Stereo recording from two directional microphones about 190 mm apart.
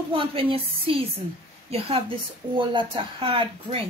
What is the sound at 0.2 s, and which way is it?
A woman's voice, 30° right (ahead or behind).